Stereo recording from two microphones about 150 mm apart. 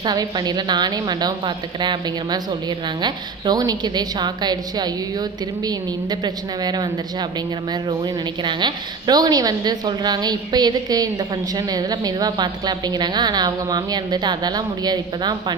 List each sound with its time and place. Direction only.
0.0 s a woman's voice: 30° right (ahead or behind)